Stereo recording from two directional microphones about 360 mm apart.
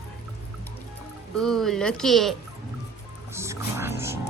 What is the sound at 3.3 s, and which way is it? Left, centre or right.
Music, centre.